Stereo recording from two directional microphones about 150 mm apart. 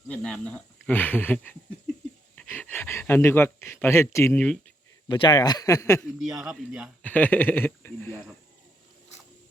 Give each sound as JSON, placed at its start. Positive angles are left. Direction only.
{"t": 0.1, "sound": "speech", "side_deg": 10}
{"t": 5.0, "sound": "speech", "side_deg": 30}
{"t": 6.1, "sound": "speech", "side_deg": -5}
{"t": 7.0, "sound": "speech", "side_deg": 10}